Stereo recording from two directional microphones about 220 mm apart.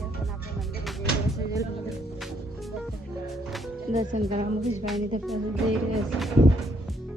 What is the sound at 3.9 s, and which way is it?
Speech, 30° right (ahead or behind).